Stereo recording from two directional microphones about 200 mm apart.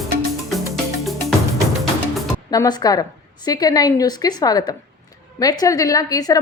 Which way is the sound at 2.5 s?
20° left (ahead or behind).